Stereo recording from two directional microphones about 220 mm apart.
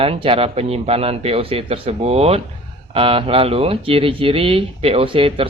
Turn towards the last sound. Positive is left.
turn(degrees=-25)  # may be behind; listen again after turning